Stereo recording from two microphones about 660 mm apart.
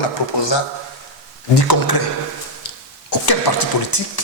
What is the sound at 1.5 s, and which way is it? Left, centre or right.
Speech, left.